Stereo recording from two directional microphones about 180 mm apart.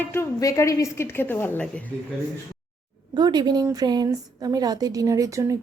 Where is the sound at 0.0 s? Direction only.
15° left (ahead or behind).